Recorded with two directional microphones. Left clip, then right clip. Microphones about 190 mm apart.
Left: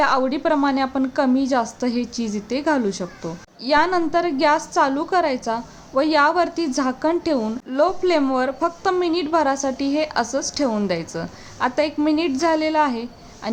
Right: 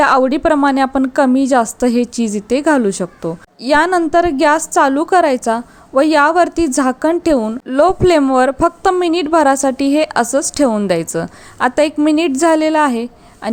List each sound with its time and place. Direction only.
0.0 s a woman's voice: 40° right (ahead or behind)